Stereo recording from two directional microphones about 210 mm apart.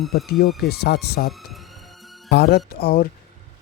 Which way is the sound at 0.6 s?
50° left (ahead or behind).